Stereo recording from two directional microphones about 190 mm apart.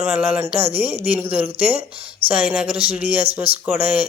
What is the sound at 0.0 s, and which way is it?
Speech, 10° right (ahead or behind).